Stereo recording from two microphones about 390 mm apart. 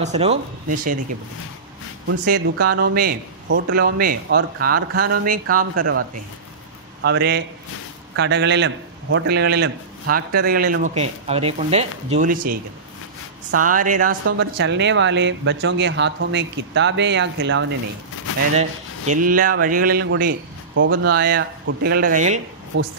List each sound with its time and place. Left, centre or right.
0.0 s speech: centre
2.3 s speech: right
2.8 s speech: right
13.7 s speech: right
18.5 s speech: centre